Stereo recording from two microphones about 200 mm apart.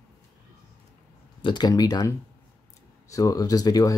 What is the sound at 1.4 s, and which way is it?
Speech, 20° left (ahead or behind).